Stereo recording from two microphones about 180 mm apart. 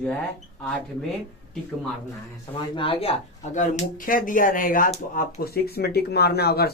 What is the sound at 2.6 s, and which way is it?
Speech, 30° left (ahead or behind).